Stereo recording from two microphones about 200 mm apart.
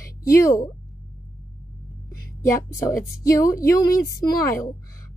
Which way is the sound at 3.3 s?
15° left (ahead or behind).